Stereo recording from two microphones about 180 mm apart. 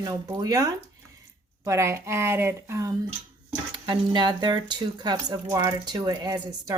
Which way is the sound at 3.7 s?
25° right (ahead or behind).